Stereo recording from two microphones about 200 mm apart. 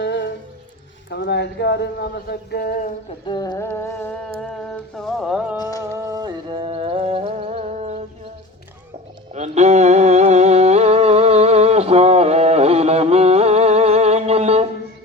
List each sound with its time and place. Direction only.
0.0 s music: 65° left (ahead or behind)
1.1 s speech: 55° left (ahead or behind)
3.2 s music: 20° left (ahead or behind)
4.9 s a sound: centre (ahead or behind)
6.1 s music: 20° right (ahead or behind)
9.3 s a sound: 35° right (ahead or behind)